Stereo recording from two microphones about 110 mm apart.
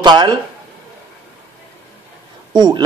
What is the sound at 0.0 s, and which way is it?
Speech, 40° right (ahead or behind).